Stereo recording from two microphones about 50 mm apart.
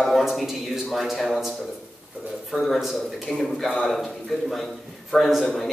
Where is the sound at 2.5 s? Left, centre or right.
Centre.